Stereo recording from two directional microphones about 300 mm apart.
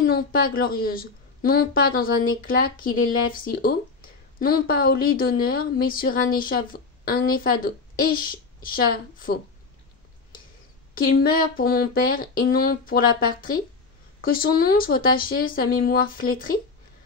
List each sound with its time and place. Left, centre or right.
0.0 s a woman's voice: left
11.0 s a woman's voice: left